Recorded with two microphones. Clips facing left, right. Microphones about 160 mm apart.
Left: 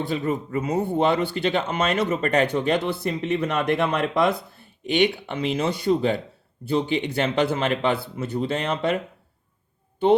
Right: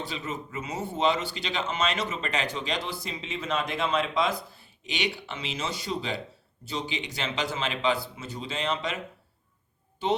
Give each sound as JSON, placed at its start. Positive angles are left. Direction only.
{"t": 0.0, "sound": "speech", "side_deg": 55}